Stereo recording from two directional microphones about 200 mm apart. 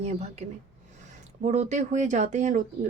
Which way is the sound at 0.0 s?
35° right (ahead or behind).